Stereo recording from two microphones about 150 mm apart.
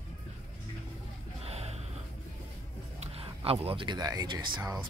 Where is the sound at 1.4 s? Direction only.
45° right (ahead or behind).